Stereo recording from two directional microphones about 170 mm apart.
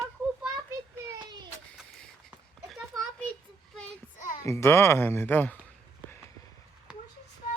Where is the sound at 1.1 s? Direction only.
25° right (ahead or behind).